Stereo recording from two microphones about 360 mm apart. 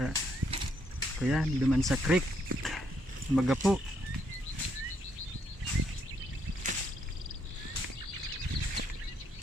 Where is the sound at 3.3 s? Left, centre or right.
Centre.